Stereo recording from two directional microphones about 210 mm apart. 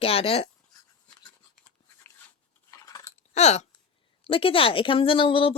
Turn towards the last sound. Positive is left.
turn(degrees=25)  # may be behind; listen again after turning